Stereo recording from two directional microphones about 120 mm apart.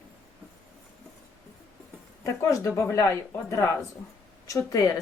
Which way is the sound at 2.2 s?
25° left (ahead or behind).